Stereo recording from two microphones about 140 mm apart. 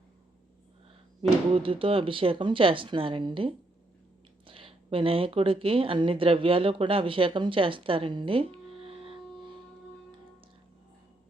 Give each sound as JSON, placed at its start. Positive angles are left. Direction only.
{"t": 1.5, "sound": "speech", "side_deg": -40}